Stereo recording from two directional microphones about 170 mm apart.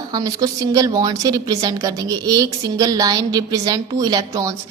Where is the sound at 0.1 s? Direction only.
20° right (ahead or behind).